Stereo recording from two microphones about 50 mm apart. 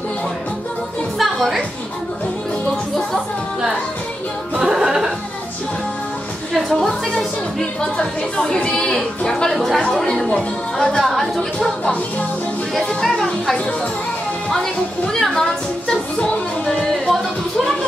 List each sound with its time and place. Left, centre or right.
1.1 s music: centre
4.6 s music: centre
6.5 s music: centre
8.0 s speech: centre
11.1 s a woman's voice: centre
11.8 s music: left
12.7 s speech: centre
15.1 s speech: centre
15.9 s music: left
16.6 s music: centre